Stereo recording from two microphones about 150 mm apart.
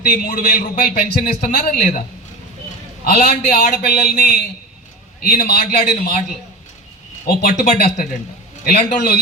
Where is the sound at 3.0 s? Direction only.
85° left.